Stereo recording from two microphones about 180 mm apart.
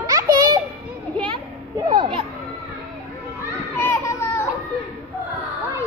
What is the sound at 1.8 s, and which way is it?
Speech, 25° right (ahead or behind).